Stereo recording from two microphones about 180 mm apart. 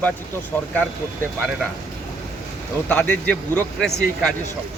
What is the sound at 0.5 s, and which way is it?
Speech, 10° left (ahead or behind).